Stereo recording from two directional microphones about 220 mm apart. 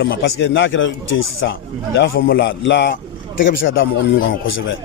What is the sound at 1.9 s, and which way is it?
A man's voice, 45° left (ahead or behind).